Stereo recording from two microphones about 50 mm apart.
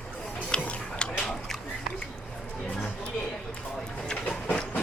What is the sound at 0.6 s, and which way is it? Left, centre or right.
Music, left.